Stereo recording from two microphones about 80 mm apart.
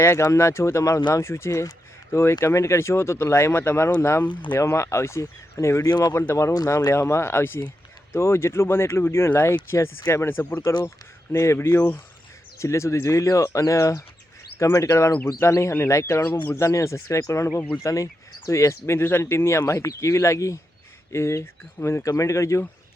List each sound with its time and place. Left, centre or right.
0.0 s speech: left
5.9 s speech: left
6.1 s speech: left